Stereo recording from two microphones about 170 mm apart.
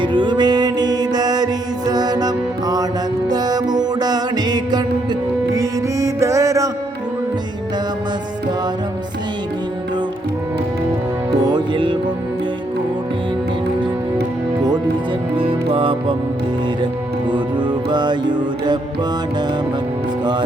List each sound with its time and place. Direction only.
0.0 s music: 25° right (ahead or behind)
11.3 s music: 25° right (ahead or behind)
15.4 s music: 30° right (ahead or behind)
17.3 s music: 25° right (ahead or behind)